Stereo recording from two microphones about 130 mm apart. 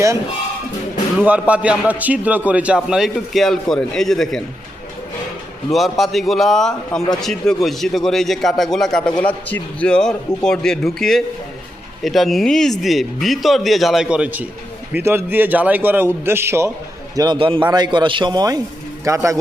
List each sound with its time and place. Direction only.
1.2 s a man's voice: 10° right (ahead or behind)
5.7 s a man's voice: centre (ahead or behind); by 16.7 s 20° right (ahead or behind)
17.3 s a man's voice: 45° right (ahead or behind); by 19.4 s 25° right (ahead or behind)